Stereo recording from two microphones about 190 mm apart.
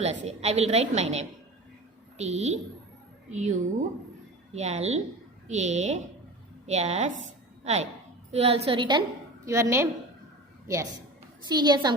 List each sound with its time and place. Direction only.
0.0 s a woman's voice: 35° right (ahead or behind)
9.5 s a woman's voice: 15° right (ahead or behind)
11.4 s a child's voice: 20° right (ahead or behind)